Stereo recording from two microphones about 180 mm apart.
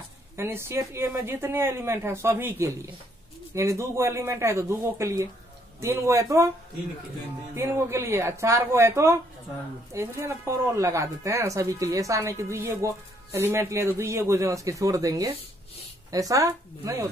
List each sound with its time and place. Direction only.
0.4 s speech: 15° right (ahead or behind)
7.5 s speech: 15° right (ahead or behind)